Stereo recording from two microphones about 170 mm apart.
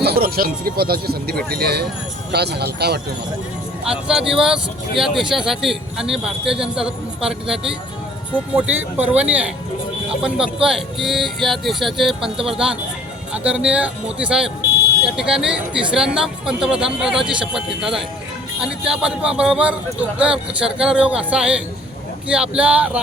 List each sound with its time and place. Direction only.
0.0 s speech: 65° right (ahead or behind)
3.8 s speech: 5° right (ahead or behind)